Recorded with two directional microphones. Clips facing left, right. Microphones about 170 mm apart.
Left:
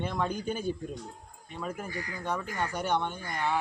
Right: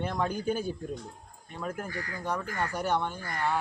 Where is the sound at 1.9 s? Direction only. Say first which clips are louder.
Even; 15° left (ahead or behind).